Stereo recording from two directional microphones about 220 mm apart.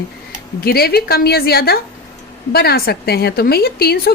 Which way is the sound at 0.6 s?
45° left (ahead or behind).